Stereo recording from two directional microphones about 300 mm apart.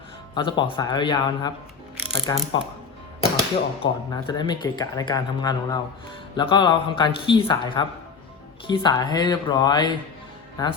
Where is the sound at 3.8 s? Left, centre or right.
Centre.